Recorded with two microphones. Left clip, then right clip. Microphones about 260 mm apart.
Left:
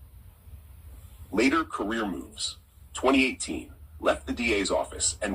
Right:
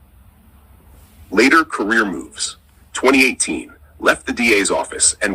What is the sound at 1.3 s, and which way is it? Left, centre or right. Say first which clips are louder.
Speech: right 12 dB; right.